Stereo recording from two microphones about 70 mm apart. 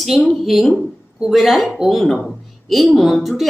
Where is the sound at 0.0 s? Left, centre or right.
Centre.